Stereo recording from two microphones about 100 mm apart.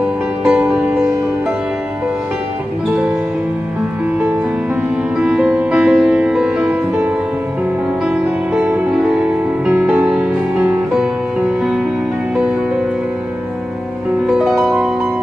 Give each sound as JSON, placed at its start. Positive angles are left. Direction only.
{"t": 0.4, "sound": "music", "side_deg": -5}
{"t": 5.1, "sound": "music", "side_deg": -10}
{"t": 8.6, "sound": "music", "side_deg": -15}
{"t": 10.9, "sound": "music", "side_deg": -5}
{"t": 14.2, "sound": "music", "side_deg": -5}